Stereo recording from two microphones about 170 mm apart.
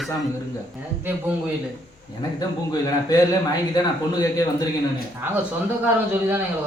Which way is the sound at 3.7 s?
20° left (ahead or behind).